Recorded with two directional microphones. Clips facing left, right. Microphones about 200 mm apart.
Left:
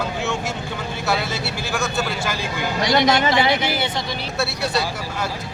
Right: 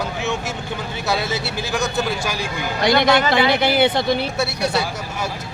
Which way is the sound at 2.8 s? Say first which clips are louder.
Right 2 dB; 60° right (ahead or behind).